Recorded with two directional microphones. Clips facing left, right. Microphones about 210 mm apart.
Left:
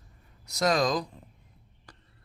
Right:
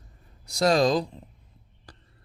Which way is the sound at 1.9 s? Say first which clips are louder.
Right 3 dB; 35° right (ahead or behind).